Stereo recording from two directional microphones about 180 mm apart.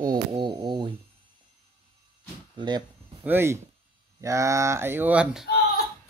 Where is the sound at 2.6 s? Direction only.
25° right (ahead or behind).